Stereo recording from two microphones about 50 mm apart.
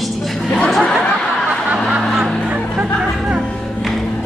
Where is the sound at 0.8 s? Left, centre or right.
Centre.